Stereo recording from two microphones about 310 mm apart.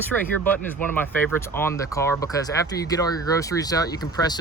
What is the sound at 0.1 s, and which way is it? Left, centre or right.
Speech, centre.